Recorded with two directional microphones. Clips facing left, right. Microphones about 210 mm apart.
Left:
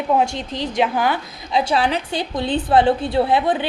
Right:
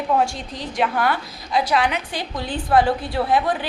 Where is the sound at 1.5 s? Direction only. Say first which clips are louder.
Left 2 dB; 25° left (ahead or behind).